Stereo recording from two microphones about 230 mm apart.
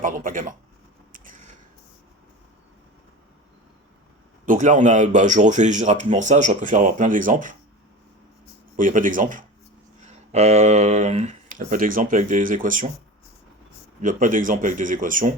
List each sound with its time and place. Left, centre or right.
0.0 s speech: right
1.1 s a sound: right
4.4 s speech: right
8.7 s speech: right
14.0 s speech: right